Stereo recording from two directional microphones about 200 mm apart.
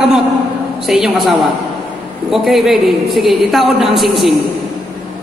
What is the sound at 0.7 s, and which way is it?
A woman's voice, centre (ahead or behind).